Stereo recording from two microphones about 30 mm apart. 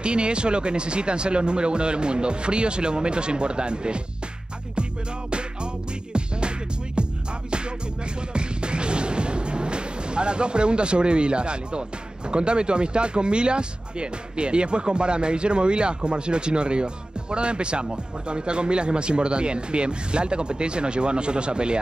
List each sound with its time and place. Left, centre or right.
0.0 s speech: right
6.1 s music: right
8.3 s music: right
12.3 s speech: right